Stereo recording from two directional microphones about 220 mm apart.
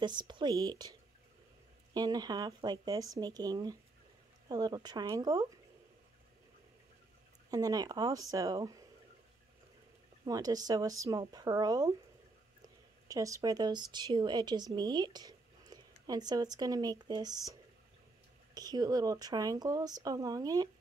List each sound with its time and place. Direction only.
0.0 s speech: 20° right (ahead or behind)
2.0 s speech: 20° right (ahead or behind)
7.5 s speech: 15° right (ahead or behind)
10.2 s speech: 15° right (ahead or behind)